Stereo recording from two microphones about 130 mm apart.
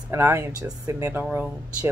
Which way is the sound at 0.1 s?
20° right (ahead or behind).